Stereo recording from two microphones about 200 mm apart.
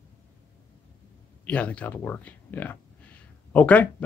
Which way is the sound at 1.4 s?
5° left (ahead or behind).